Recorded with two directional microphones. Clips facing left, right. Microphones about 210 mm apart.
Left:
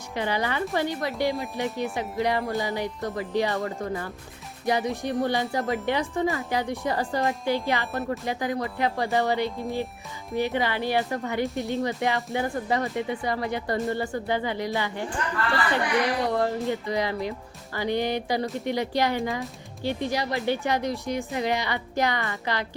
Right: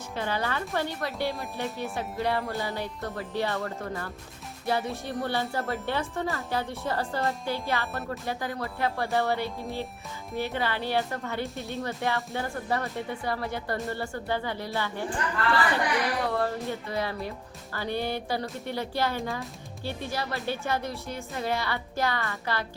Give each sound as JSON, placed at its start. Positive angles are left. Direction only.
{"t": 0.2, "sound": "speech", "side_deg": 15}
{"t": 16.2, "sound": "speech", "side_deg": 15}